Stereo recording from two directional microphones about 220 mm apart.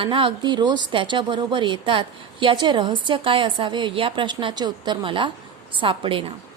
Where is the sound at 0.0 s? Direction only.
25° right (ahead or behind).